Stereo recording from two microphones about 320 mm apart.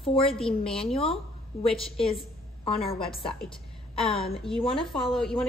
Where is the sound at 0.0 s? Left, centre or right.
Centre.